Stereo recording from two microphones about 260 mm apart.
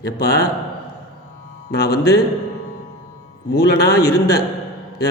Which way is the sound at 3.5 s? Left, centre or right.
Left.